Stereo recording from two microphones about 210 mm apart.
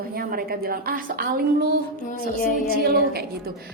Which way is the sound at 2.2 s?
45° left (ahead or behind).